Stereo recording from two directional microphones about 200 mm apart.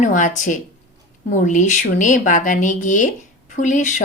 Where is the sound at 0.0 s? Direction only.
40° left (ahead or behind).